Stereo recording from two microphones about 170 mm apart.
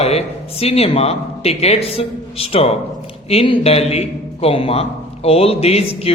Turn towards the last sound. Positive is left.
turn(degrees=35)  # may be behind; listen again after turning